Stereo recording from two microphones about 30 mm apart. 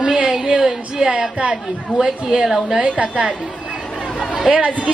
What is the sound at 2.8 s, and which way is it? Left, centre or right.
Speech, right.